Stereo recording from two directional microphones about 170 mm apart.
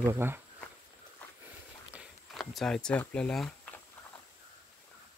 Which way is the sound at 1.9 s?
Centre (ahead or behind).